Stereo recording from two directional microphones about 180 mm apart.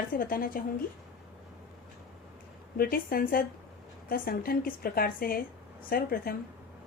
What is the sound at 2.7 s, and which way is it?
A woman's voice, 55° left (ahead or behind).